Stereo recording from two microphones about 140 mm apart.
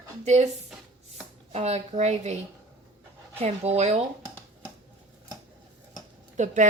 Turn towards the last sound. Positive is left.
turn(degrees=-60)  # may be behind; listen again after turning